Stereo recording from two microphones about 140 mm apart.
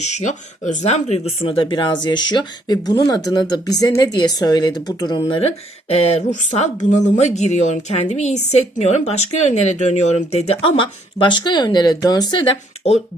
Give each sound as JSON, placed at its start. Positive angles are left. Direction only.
{"t": 0.0, "sound": "speech", "side_deg": 55}